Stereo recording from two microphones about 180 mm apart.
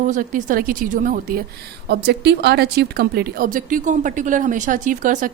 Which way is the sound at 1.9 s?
65° right (ahead or behind).